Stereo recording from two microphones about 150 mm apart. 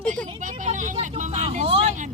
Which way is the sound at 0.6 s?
55° right (ahead or behind).